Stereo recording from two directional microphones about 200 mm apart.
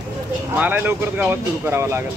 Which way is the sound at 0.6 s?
10° right (ahead or behind).